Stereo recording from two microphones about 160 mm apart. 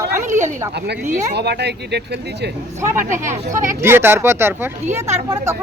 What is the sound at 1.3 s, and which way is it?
Speech, 90° right.